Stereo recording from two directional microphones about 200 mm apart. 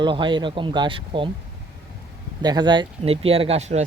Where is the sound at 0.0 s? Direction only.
25° right (ahead or behind).